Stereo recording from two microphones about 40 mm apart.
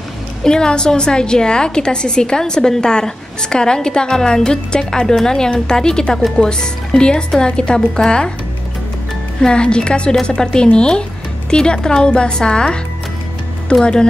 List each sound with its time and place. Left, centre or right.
0.4 s a woman's voice: centre
9.4 s a woman's voice: left